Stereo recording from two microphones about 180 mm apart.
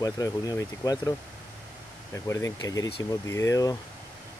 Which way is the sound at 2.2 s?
15° left (ahead or behind).